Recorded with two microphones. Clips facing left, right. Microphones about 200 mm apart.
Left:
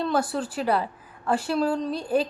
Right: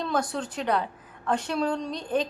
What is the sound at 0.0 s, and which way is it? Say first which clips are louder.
A woman's voice: left 3 dB; 5° left (ahead or behind).